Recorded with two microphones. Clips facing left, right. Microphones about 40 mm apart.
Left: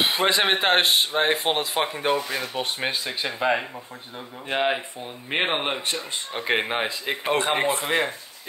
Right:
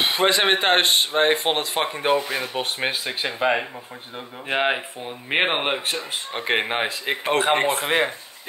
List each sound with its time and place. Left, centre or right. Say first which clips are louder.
0.0 s speech: right 2 dB; centre; by 8.1 s right